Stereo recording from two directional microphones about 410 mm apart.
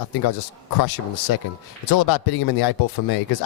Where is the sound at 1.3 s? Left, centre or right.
Left.